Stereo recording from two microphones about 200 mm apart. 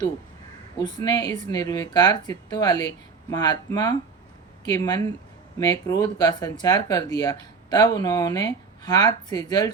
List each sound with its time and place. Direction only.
0.8 s speech: 20° left (ahead or behind)